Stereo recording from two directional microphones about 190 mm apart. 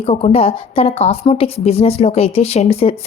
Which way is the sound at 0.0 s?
35° left (ahead or behind).